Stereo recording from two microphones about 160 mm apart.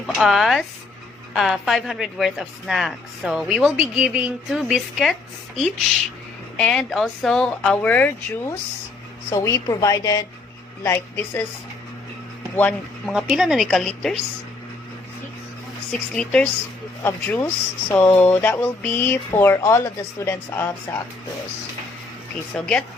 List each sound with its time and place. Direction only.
0.2 s speech: centre (ahead or behind)
6.6 s a woman's voice: 5° left (ahead or behind)
12.5 s speech: 10° left (ahead or behind)
13.1 s speech: 5° right (ahead or behind)
16.1 s speech: 5° left (ahead or behind)
22.5 s speech: 5° left (ahead or behind)